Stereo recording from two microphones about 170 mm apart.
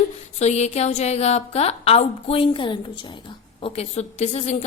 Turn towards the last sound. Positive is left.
turn(degrees=40)  # may be behind; listen again after turning